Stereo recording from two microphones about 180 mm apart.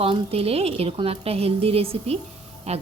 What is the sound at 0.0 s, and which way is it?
A woman's voice, 35° right (ahead or behind).